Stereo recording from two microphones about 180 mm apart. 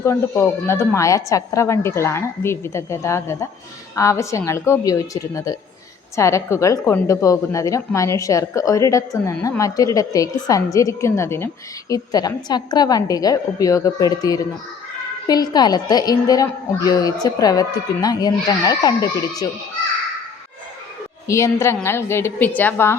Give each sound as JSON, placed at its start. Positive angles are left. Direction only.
{"t": 0.0, "sound": "a woman's voice", "side_deg": 15}
{"t": 21.2, "sound": "speech", "side_deg": 15}